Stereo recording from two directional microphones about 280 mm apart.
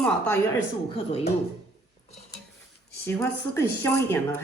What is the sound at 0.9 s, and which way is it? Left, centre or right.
Speech, left.